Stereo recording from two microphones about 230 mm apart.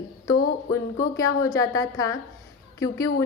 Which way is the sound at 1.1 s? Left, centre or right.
Centre.